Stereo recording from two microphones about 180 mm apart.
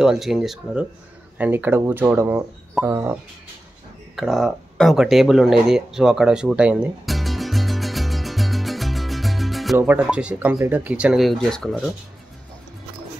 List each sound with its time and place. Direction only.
0.0 s speech: centre (ahead or behind)
4.2 s a sound: centre (ahead or behind)
9.8 s speech: 10° right (ahead or behind)